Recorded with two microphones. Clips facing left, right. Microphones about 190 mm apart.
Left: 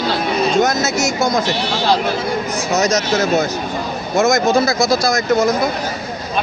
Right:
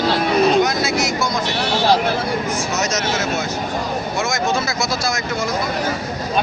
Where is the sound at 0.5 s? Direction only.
45° left (ahead or behind).